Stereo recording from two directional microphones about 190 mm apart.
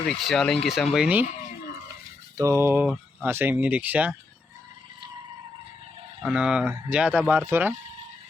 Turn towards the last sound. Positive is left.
turn(degrees=-10)  # may be behind; listen again after turning